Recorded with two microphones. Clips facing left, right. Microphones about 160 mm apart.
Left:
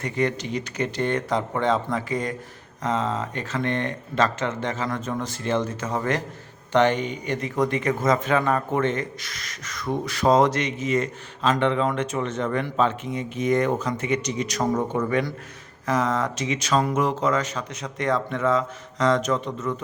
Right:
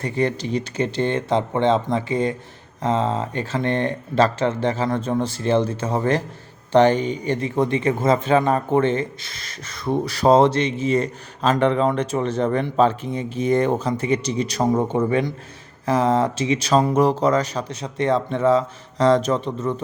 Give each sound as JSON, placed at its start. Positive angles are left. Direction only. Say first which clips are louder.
{"t": 0.0, "sound": "speech", "louder": "right 3 dB", "side_deg": -30}